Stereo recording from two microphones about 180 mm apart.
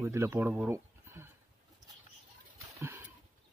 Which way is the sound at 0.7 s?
15° right (ahead or behind).